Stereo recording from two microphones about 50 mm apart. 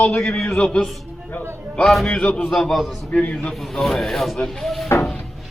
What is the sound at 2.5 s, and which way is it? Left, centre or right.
Speech, centre.